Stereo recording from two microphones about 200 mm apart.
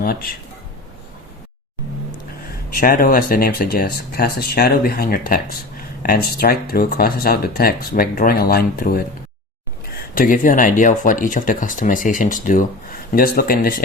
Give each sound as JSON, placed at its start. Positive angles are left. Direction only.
{"t": 0.0, "sound": "speech", "side_deg": 45}
{"t": 2.7, "sound": "speech", "side_deg": 45}
{"t": 10.2, "sound": "speech", "side_deg": 40}